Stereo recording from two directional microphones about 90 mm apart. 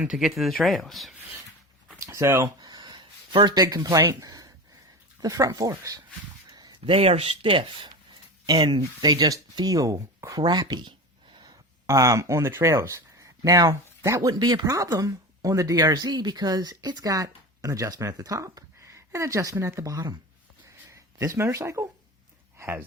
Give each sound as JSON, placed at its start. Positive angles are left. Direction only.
{"t": 0.0, "sound": "speech", "side_deg": -5}
{"t": 2.0, "sound": "speech", "side_deg": -30}
{"t": 2.6, "sound": "a sound", "side_deg": -55}
{"t": 5.2, "sound": "speech", "side_deg": -45}
{"t": 6.5, "sound": "a sound", "side_deg": -45}
{"t": 6.8, "sound": "speech", "side_deg": -90}
{"t": 8.5, "sound": "speech", "side_deg": -55}
{"t": 10.4, "sound": "speech", "side_deg": -50}
{"t": 11.9, "sound": "speech", "side_deg": -35}
{"t": 14.3, "sound": "speech", "side_deg": -50}
{"t": 20.9, "sound": "a sound", "side_deg": -40}
{"t": 21.3, "sound": "speech", "side_deg": -30}
{"t": 22.5, "sound": "a sound", "side_deg": -25}